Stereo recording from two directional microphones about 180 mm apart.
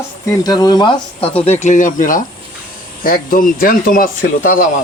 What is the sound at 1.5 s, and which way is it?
Speech, 40° left (ahead or behind).